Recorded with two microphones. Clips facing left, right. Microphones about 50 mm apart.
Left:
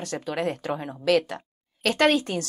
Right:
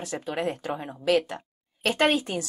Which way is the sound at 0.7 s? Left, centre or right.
Centre.